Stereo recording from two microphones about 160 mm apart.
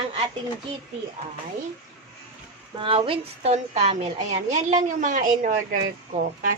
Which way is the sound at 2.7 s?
35° right (ahead or behind).